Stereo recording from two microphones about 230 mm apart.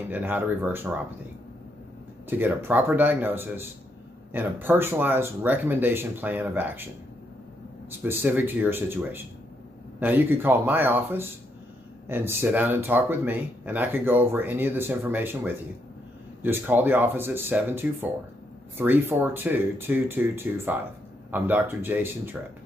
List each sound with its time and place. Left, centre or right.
0.1 s speech: centre
2.2 s speech: centre
8.0 s speech: centre